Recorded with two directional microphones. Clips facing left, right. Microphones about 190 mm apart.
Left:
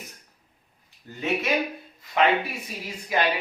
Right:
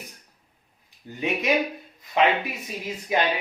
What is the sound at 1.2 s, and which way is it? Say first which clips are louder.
Speech: right 2 dB; 15° right (ahead or behind).